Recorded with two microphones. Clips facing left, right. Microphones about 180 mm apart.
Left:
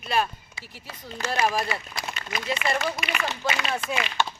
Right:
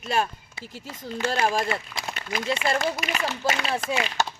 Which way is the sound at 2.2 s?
55° right (ahead or behind).